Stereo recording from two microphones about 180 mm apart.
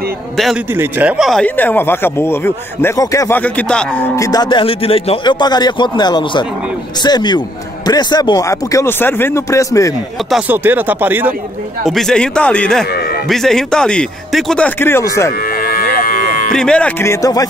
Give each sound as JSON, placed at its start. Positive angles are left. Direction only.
{"t": 0.7, "sound": "a man's voice", "side_deg": -10}
{"t": 10.3, "sound": "speech", "side_deg": -10}
{"t": 11.8, "sound": "speech", "side_deg": 0}
{"t": 15.5, "sound": "cattle", "side_deg": 55}
{"t": 16.5, "sound": "speech", "side_deg": 5}